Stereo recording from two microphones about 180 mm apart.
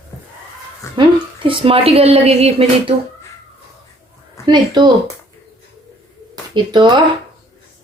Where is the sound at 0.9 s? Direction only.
30° right (ahead or behind).